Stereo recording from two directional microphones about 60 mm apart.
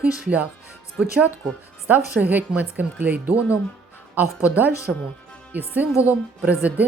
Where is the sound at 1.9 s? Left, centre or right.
Right.